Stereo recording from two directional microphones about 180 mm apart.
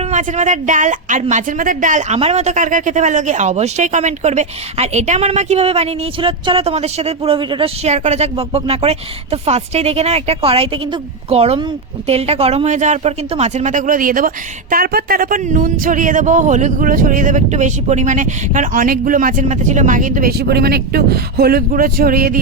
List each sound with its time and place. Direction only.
0.1 s a woman's voice: 40° right (ahead or behind)